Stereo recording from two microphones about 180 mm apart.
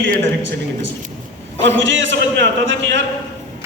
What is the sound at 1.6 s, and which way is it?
A man's voice, 90° right.